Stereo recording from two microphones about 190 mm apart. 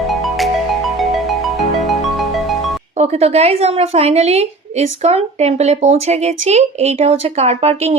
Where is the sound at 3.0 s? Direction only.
35° right (ahead or behind).